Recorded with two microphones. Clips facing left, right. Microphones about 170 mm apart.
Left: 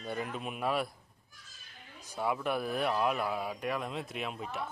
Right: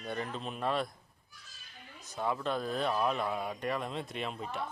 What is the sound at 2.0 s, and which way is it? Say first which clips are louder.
A man's voice: left 1 dB; 10° left (ahead or behind).